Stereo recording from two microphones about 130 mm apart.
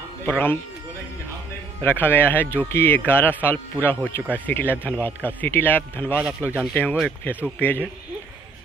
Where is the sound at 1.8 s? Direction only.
15° left (ahead or behind).